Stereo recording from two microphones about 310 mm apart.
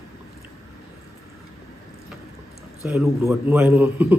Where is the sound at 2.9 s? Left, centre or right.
Centre.